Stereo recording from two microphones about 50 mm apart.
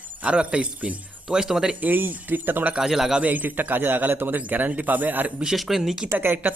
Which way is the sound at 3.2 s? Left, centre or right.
Right.